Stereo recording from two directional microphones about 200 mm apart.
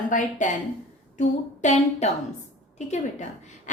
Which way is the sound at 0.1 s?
40° left (ahead or behind).